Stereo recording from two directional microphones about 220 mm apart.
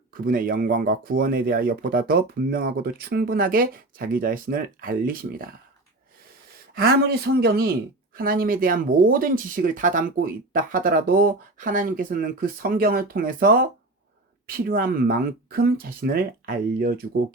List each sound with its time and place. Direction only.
0.3 s speech: 40° right (ahead or behind)
6.7 s speech: 45° right (ahead or behind)